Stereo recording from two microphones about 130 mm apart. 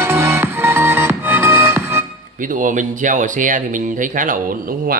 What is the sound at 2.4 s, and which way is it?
Speech, 90° right.